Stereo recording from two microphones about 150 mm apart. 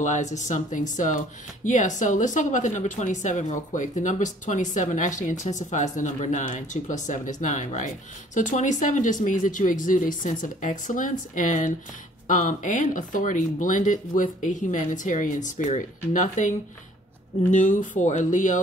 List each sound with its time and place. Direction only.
0.0 s speech: 55° left (ahead or behind)